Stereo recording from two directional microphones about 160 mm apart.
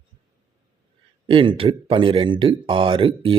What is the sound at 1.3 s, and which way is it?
Speech, 30° right (ahead or behind).